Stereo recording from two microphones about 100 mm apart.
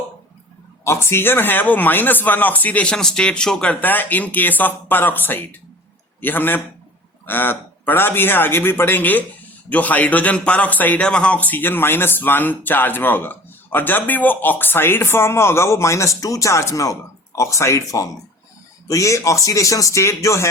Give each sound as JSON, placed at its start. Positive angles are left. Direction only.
{"t": 0.9, "sound": "a man's voice", "side_deg": 25}